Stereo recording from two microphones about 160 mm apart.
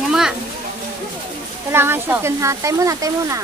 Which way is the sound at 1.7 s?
15° right (ahead or behind).